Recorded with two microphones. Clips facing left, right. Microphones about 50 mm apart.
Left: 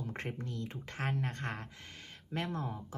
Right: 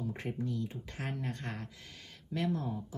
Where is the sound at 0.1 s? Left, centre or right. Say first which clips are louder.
Right 3 dB; left.